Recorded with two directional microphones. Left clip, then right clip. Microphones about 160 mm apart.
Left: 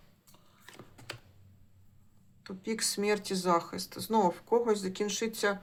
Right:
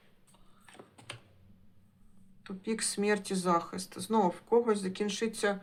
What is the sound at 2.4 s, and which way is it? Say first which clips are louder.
Speech: left 1 dB; 5° left (ahead or behind).